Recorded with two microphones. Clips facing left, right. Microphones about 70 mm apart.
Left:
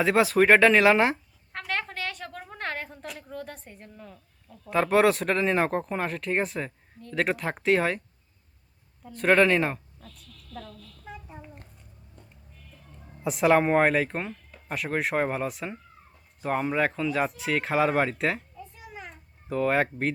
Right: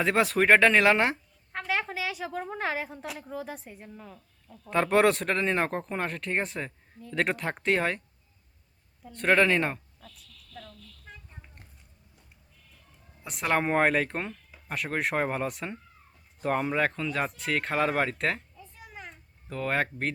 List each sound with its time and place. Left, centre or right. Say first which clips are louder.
0.0 s a woman's voice: left 3 dB; centre
9.0 s a woman's voice: left 2 dB; centre
10.1 s a sound: left 6 dB; left
10.5 s a woman's voice: left 5 dB; left
11.0 s a sound: left 10 dB; centre
13.2 s a woman's voice: left 6 dB; centre